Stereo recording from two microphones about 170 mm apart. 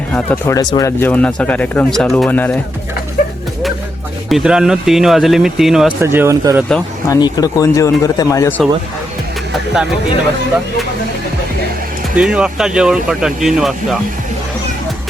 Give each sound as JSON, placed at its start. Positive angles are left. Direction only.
{"t": 0.1, "sound": "speech", "side_deg": 10}
{"t": 0.5, "sound": "speech", "side_deg": 25}
{"t": 4.3, "sound": "speech", "side_deg": -5}
{"t": 6.0, "sound": "speech", "side_deg": -15}
{"t": 7.1, "sound": "speech", "side_deg": 20}
{"t": 12.1, "sound": "speech", "side_deg": -5}